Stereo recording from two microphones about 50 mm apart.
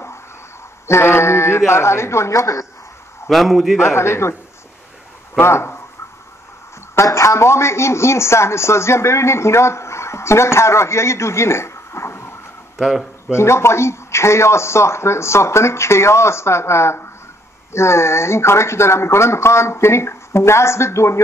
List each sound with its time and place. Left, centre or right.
0.8 s speech: left
3.3 s a man's voice: centre
3.8 s speech: left
5.4 s speech: left
7.0 s a man's voice: left
12.7 s speech: centre
13.3 s speech: left